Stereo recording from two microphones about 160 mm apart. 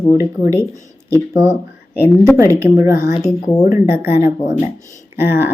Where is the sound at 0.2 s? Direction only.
15° right (ahead or behind).